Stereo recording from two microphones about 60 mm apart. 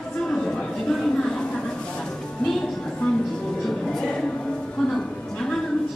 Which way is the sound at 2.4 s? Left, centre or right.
Centre.